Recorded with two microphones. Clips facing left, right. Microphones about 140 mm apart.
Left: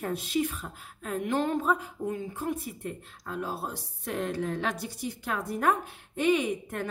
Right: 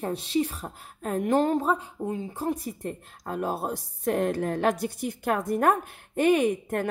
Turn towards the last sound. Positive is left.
turn(degrees=-50)  # may be behind; listen again after turning